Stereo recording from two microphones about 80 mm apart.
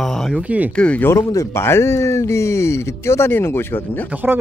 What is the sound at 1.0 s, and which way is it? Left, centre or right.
Speech, left.